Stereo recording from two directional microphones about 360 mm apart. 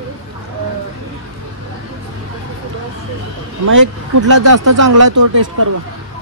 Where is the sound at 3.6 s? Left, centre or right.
Right.